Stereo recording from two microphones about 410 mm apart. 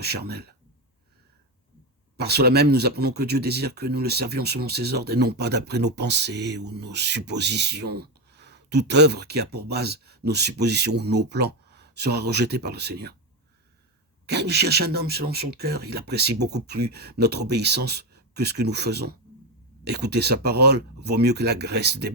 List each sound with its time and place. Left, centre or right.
0.0 s speech: right
2.1 s speech: right
14.3 s speech: right